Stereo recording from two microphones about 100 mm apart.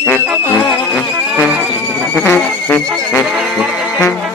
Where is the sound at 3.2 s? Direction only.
5° right (ahead or behind).